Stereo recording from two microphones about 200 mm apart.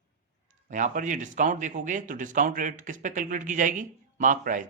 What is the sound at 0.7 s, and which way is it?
Speech, 40° right (ahead or behind).